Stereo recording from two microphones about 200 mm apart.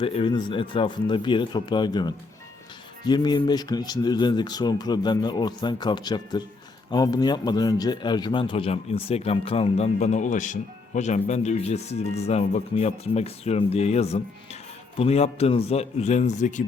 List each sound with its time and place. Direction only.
0.0 s speech: 30° left (ahead or behind)